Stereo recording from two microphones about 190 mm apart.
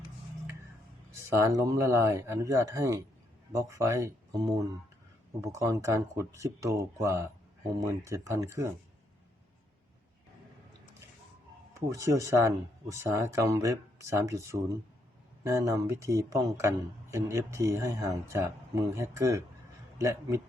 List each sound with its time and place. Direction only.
1.4 s speech: 15° right (ahead or behind)
11.7 s speech: 15° right (ahead or behind)